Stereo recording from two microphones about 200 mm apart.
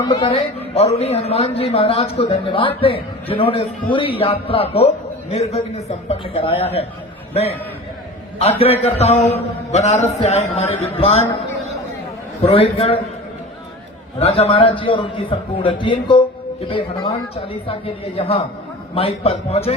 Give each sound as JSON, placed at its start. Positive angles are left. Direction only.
{"t": 0.1, "sound": "a man's voice", "side_deg": 25}
{"t": 8.4, "sound": "a man's voice", "side_deg": 30}
{"t": 12.4, "sound": "speech", "side_deg": 30}
{"t": 14.2, "sound": "a man's voice", "side_deg": 30}